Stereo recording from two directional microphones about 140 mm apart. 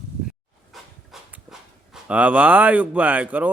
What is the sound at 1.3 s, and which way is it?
Speech, 5° right (ahead or behind).